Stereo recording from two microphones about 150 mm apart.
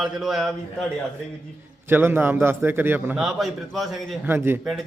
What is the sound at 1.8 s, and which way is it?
A man's voice, 15° right (ahead or behind).